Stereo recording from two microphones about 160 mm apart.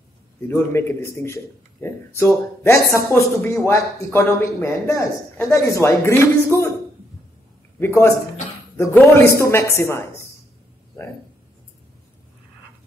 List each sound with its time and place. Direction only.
0.5 s a man's voice: 15° left (ahead or behind)
7.8 s a man's voice: 15° left (ahead or behind)